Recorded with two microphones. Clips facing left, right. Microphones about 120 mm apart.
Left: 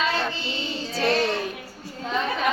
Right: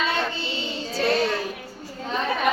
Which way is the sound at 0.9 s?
Centre (ahead or behind).